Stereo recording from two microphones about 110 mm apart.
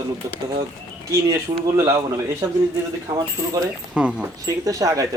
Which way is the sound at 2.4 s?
40° right (ahead or behind).